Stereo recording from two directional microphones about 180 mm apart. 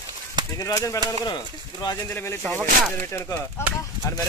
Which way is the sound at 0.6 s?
20° left (ahead or behind).